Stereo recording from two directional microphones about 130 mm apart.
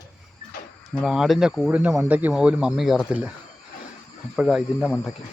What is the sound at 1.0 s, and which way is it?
Speech, centre (ahead or behind).